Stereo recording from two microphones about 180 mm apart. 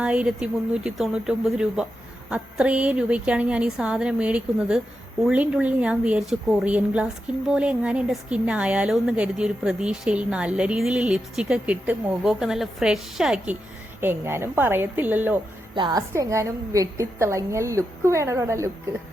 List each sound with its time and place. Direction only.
0.0 s a woman's voice: 5° right (ahead or behind)
15.7 s a woman's voice: 25° right (ahead or behind)